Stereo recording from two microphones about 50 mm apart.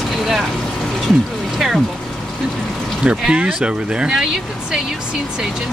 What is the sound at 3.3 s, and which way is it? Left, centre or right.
Speech, centre.